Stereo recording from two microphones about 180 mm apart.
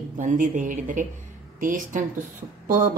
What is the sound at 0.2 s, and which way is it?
A woman's voice, 45° right (ahead or behind).